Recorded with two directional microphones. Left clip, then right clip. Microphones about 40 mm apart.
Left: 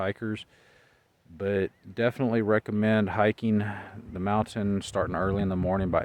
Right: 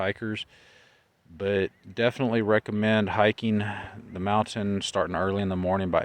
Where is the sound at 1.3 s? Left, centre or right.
Centre.